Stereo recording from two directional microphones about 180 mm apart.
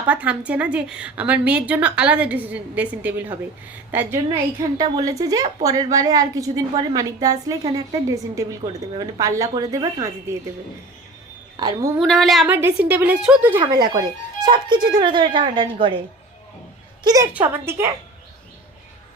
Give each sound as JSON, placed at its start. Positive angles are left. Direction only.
{"t": 0.1, "sound": "a woman's voice", "side_deg": -10}
{"t": 11.5, "sound": "a woman's voice", "side_deg": -20}
{"t": 11.9, "sound": "a woman's voice", "side_deg": 0}
{"t": 12.5, "sound": "a woman's voice", "side_deg": -10}
{"t": 14.4, "sound": "a woman's voice", "side_deg": -25}